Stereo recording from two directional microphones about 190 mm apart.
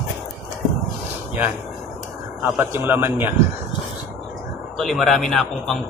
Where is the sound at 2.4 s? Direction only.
10° right (ahead or behind).